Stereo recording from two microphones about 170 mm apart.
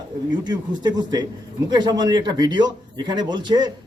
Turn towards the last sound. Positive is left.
turn(degrees=-25)  # may be behind; listen again after turning